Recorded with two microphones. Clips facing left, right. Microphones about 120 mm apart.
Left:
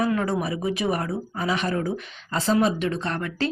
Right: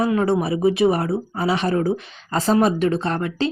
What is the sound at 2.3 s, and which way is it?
Speech, 45° right (ahead or behind).